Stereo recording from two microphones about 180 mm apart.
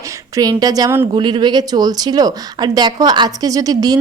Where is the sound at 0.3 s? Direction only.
20° right (ahead or behind).